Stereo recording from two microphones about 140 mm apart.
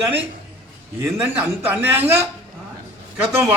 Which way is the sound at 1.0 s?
15° right (ahead or behind).